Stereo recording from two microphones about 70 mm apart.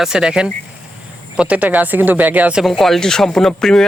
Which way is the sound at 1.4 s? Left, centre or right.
Centre.